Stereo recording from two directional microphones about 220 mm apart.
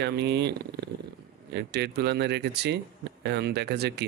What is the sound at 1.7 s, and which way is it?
Speech, 50° right (ahead or behind).